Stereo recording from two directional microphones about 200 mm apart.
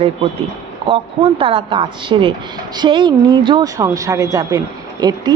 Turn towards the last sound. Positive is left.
turn(degrees=-20)  # may be behind; listen again after turning